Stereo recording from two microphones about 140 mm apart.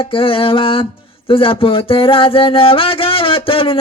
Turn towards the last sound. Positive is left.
turn(degrees=40)  # may be behind; listen again after turning